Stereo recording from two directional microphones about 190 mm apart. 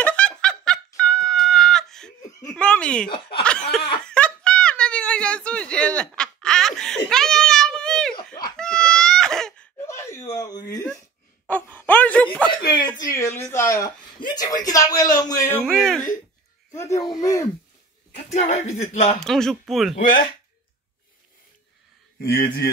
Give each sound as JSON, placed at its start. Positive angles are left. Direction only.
{"t": 0.0, "sound": "fowl", "side_deg": 5}
{"t": 2.5, "sound": "a sound", "side_deg": 5}
{"t": 3.1, "sound": "snicker", "side_deg": 30}
{"t": 4.0, "sound": "a sound", "side_deg": 5}
{"t": 8.5, "sound": "crying", "side_deg": 5}
{"t": 9.8, "sound": "a sound", "side_deg": 15}
{"t": 11.4, "sound": "a sound", "side_deg": 10}
{"t": 12.4, "sound": "chuckle", "side_deg": 25}
{"t": 13.0, "sound": "a woman's voice", "side_deg": 15}
{"t": 15.6, "sound": "speech", "side_deg": 0}
{"t": 16.9, "sound": "speech", "side_deg": 20}
{"t": 18.1, "sound": "speech", "side_deg": 35}
{"t": 19.1, "sound": "speech", "side_deg": 0}
{"t": 22.2, "sound": "speech", "side_deg": 55}